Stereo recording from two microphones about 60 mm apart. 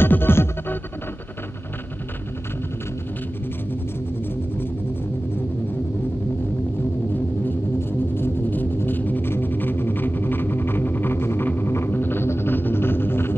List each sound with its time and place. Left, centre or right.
0.0 s music: left
8.1 s music: left